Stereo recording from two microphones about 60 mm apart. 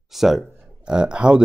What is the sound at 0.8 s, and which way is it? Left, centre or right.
Speech, centre.